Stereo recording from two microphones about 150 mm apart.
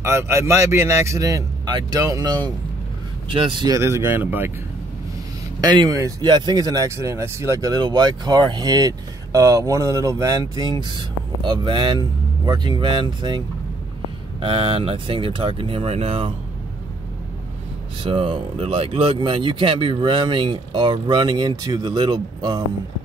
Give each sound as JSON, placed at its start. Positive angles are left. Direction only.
{"t": 0.0, "sound": "speech", "side_deg": -15}
{"t": 3.7, "sound": "speech", "side_deg": -20}
{"t": 5.6, "sound": "speech", "side_deg": -25}
{"t": 14.4, "sound": "speech", "side_deg": -35}
{"t": 18.0, "sound": "speech", "side_deg": -35}